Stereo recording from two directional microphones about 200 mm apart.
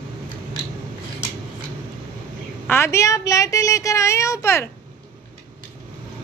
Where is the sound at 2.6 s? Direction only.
10° left (ahead or behind).